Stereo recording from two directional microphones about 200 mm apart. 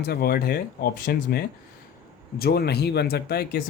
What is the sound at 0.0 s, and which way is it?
Speech, 50° left (ahead or behind).